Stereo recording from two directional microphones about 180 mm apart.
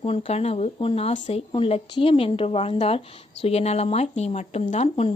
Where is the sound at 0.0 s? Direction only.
35° left (ahead or behind).